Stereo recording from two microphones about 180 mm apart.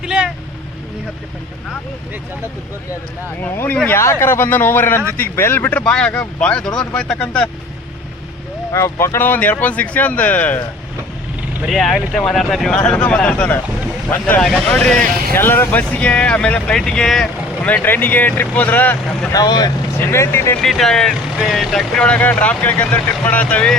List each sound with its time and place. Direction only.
0.0 s vehicle: 5° right (ahead or behind)
3.4 s speech: 10° left (ahead or behind)
8.7 s speech: 15° left (ahead or behind)
11.6 s speech: centre (ahead or behind)
19.3 s speech: 20° left (ahead or behind)
20.6 s speech: centre (ahead or behind)